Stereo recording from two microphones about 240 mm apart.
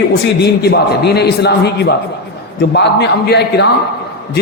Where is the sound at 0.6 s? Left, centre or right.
Left.